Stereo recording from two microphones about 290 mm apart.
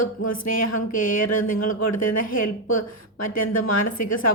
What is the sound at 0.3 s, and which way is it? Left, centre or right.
Speech, left.